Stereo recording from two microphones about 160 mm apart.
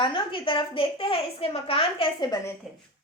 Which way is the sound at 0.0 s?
30° left (ahead or behind).